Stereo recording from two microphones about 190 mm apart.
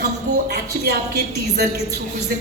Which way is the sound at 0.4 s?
55° right (ahead or behind).